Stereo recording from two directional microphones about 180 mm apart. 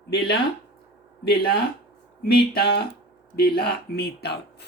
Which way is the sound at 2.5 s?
60° left (ahead or behind).